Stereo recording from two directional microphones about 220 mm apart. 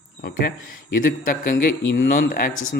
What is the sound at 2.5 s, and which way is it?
Speech, 65° left (ahead or behind).